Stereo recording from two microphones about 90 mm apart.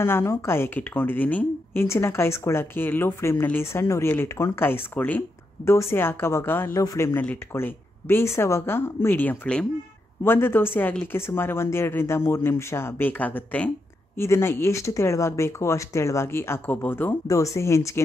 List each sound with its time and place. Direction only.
0.0 s a woman's voice: 30° left (ahead or behind)
13.2 s speech: 15° left (ahead or behind)
14.1 s speech: 30° left (ahead or behind)
17.3 s speech: 35° left (ahead or behind)